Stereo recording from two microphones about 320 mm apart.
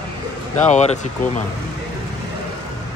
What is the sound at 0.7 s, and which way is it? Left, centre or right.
Speech, left.